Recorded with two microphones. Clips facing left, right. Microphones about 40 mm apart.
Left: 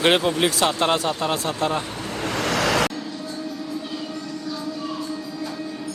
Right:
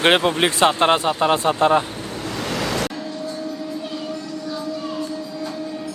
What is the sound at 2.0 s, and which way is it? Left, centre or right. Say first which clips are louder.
Waves: left 2 dB; left.